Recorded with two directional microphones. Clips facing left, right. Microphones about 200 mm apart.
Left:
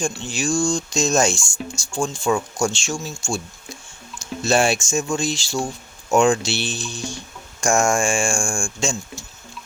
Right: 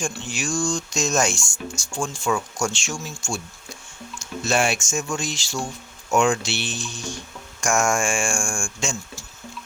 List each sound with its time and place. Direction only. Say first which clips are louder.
0.3 s speech: left 4 dB; 30° left (ahead or behind)